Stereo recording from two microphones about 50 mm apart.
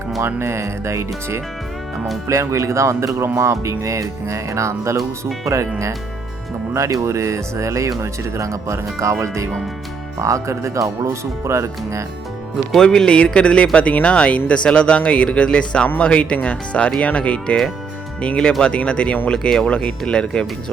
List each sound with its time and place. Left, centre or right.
0.3 s speech: right
2.2 s speech: right
6.7 s speech: right
12.7 s speech: centre